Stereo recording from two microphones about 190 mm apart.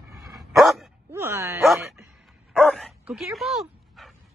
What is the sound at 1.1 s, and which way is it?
Dog, 15° right (ahead or behind).